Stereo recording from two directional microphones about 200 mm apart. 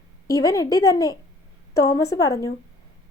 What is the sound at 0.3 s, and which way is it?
Speech, 15° left (ahead or behind).